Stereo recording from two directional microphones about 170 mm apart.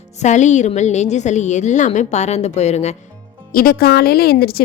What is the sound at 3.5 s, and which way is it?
A woman's voice, 60° left (ahead or behind).